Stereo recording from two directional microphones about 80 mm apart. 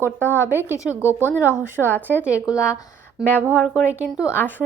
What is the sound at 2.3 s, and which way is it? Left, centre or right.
Speech, left.